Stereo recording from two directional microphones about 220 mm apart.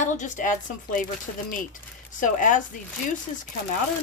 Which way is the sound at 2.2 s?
35° left (ahead or behind).